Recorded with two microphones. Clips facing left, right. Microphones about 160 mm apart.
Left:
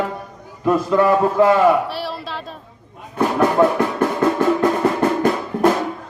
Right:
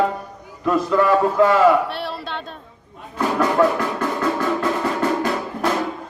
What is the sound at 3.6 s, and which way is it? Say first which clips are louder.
Speech: left 1 dB; 25° left (ahead or behind).